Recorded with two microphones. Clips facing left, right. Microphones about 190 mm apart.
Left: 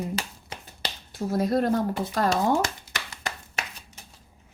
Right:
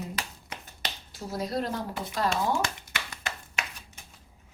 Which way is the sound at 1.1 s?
55° left (ahead or behind).